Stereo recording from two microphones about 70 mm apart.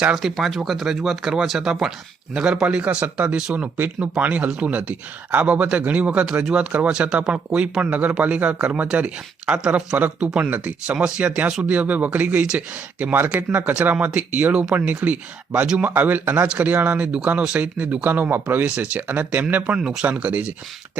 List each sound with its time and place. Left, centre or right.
0.0 s speech: centre; by 15.6 s right
15.6 s speech: centre
15.9 s speech: right